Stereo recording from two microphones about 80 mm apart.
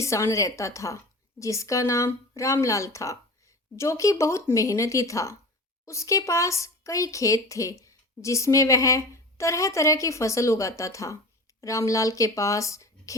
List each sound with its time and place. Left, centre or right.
0.0 s a woman's voice: left